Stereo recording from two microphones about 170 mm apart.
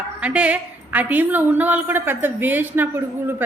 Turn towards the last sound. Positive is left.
turn(degrees=-10)  # may be behind; listen again after turning